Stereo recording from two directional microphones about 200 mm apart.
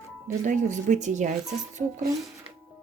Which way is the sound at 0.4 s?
40° right (ahead or behind).